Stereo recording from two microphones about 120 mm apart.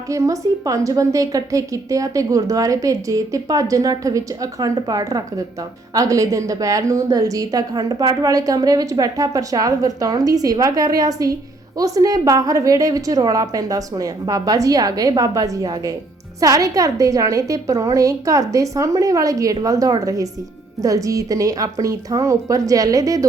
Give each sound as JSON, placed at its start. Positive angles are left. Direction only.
{"t": 0.1, "sound": "a woman's voice", "side_deg": -30}